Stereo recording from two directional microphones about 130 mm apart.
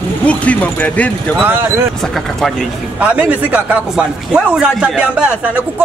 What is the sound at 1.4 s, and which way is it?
Speech, 15° right (ahead or behind).